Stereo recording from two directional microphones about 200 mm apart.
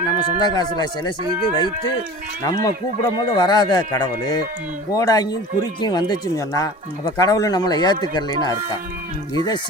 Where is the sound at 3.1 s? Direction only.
20° left (ahead or behind).